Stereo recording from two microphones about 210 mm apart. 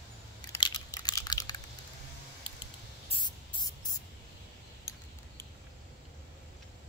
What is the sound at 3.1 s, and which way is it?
Spray, 20° left (ahead or behind).